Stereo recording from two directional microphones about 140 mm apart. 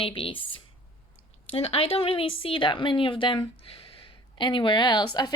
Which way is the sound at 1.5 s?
45° left (ahead or behind).